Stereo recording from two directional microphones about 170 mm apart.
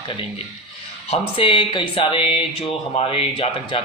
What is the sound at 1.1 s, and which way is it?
A man's voice, 30° left (ahead or behind).